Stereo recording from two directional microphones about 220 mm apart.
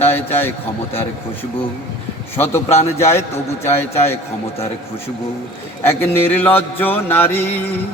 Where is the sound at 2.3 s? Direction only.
10° left (ahead or behind).